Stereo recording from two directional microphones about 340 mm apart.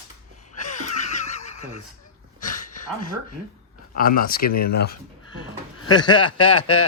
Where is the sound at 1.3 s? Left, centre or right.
Centre.